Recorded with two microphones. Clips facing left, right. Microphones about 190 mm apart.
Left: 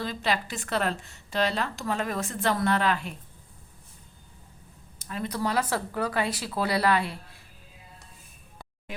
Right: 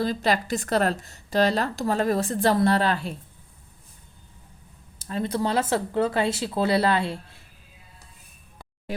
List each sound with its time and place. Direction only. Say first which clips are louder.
0.0 s a woman's voice: right 5 dB; 40° right (ahead or behind)
4.9 s speech: right 5 dB; 30° right (ahead or behind)